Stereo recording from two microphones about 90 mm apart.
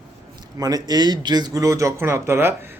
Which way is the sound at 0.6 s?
45° right (ahead or behind).